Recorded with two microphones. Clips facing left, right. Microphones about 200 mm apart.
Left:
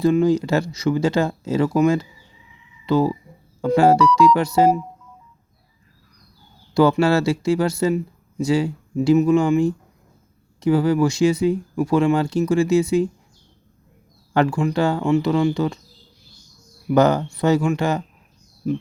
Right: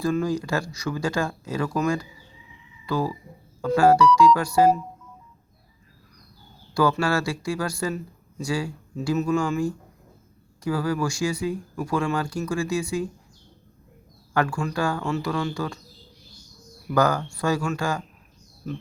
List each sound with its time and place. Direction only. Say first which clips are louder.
0.0 s speech: left 7 dB; 20° left (ahead or behind)
6.7 s speech: left 6 dB; 25° left (ahead or behind)
14.3 s speech: left 6 dB; 20° left (ahead or behind)
16.9 s speech: left 6 dB; 20° left (ahead or behind)